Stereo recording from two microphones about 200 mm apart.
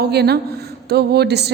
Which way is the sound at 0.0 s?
55° right (ahead or behind).